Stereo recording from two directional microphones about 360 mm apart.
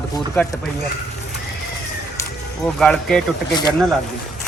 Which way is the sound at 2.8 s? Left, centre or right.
Centre.